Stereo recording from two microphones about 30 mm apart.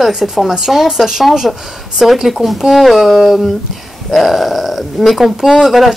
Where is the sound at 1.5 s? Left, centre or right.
Centre.